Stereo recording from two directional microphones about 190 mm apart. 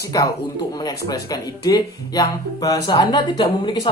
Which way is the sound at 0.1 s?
20° left (ahead or behind).